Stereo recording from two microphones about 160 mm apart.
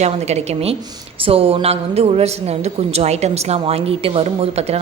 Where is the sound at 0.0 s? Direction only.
45° right (ahead or behind).